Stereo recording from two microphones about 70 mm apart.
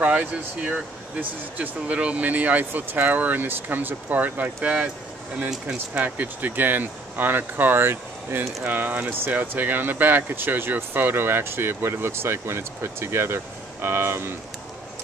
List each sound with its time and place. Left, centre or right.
0.0 s speech: right
5.5 s speech: centre
6.0 s speech: right